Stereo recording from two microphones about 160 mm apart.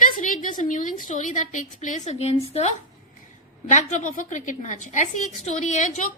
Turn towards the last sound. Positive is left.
turn(degrees=50)  # may be behind; listen again after turning